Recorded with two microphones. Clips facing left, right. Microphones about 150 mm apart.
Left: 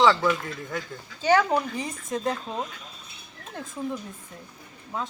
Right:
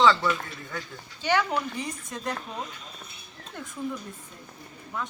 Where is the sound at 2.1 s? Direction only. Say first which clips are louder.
Left 7 dB; 25° left (ahead or behind).